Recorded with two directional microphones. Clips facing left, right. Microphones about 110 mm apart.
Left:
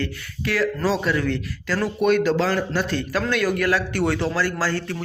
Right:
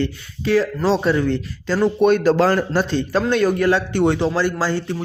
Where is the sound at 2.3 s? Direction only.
45° right (ahead or behind).